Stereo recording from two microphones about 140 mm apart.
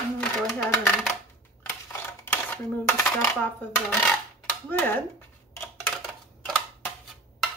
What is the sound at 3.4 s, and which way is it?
Dishes, 10° left (ahead or behind).